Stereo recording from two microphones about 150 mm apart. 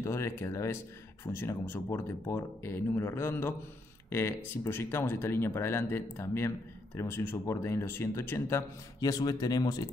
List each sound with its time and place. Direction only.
0.0 s speech: 20° left (ahead or behind)